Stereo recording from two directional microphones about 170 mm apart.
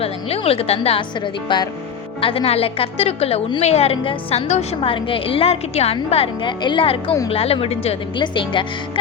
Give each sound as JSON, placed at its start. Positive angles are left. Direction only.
{"t": 0.0, "sound": "a woman's voice", "side_deg": 35}